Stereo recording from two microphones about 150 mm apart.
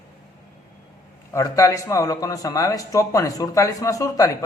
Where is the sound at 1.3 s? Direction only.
20° left (ahead or behind).